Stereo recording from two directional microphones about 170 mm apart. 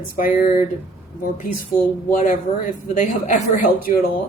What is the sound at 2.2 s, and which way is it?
A woman's voice, 50° left (ahead or behind).